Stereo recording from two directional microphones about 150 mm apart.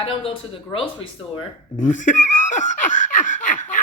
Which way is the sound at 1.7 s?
60° left (ahead or behind).